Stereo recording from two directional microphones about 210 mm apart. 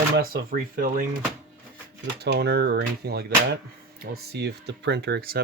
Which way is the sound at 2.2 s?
50° right (ahead or behind).